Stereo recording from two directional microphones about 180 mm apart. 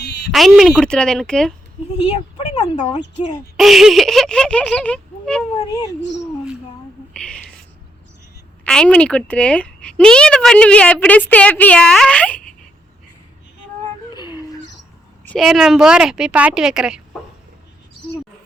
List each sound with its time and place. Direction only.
0.0 s a sound: 65° left (ahead or behind)
0.3 s a woman's voice: centre (ahead or behind)
2.0 s speech: 35° left (ahead or behind)
3.6 s a woman's voice: centre (ahead or behind)
7.1 s whispering: 5° left (ahead or behind)
8.6 s speech: 5° left (ahead or behind)
14.1 s a sound: 25° left (ahead or behind)
15.2 s a woman's voice: 5° left (ahead or behind)